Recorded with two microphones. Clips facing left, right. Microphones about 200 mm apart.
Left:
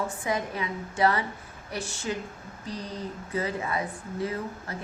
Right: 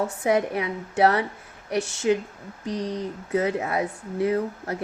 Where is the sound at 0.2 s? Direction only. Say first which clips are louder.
Right 7 dB; 70° right (ahead or behind).